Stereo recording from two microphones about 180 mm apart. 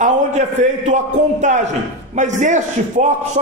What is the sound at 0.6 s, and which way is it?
A man's voice, 40° right (ahead or behind).